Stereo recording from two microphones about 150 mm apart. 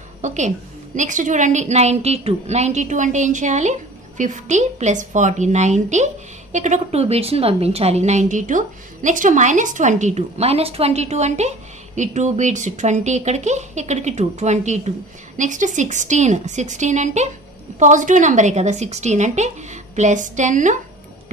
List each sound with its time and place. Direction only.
0.2 s a woman's voice: 50° right (ahead or behind)